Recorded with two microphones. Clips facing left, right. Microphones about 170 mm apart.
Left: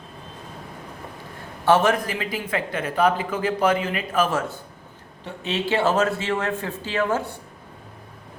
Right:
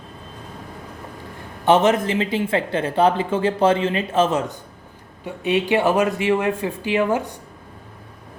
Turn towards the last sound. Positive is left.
turn(degrees=-15)  # may be behind; listen again after turning